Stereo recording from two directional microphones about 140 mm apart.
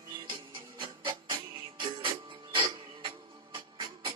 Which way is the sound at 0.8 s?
30° right (ahead or behind).